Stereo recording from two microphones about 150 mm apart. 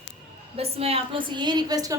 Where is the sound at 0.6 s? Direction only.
40° right (ahead or behind); by 1.9 s 25° right (ahead or behind).